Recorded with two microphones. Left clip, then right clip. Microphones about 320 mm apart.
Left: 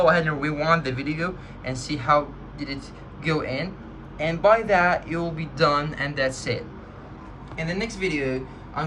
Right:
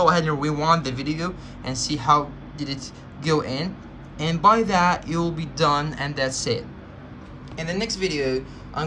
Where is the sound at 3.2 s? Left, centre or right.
Centre.